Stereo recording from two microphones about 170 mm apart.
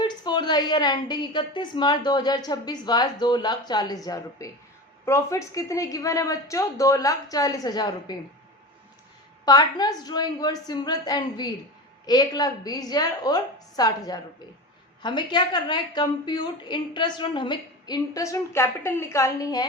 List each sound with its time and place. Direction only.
0.0 s a woman's voice: 25° left (ahead or behind)
9.5 s a woman's voice: 25° left (ahead or behind)